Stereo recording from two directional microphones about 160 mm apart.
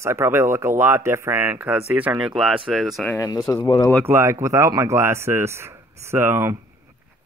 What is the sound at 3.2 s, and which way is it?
Speech, 15° left (ahead or behind).